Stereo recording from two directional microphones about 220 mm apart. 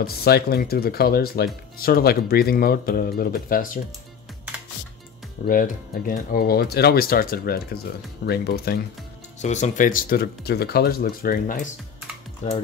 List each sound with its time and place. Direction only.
0.0 s speech: 45° left (ahead or behind)
5.5 s speech: 40° left (ahead or behind)
9.4 s speech: 30° left (ahead or behind)